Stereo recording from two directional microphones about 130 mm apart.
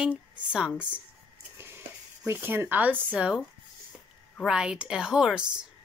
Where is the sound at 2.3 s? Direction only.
15° right (ahead or behind).